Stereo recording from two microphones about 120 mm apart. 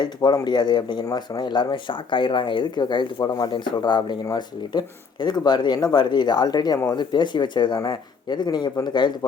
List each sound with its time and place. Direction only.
0.0 s speech: 40° left (ahead or behind)